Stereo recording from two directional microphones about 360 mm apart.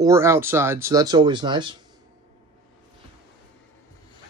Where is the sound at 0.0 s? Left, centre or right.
Centre.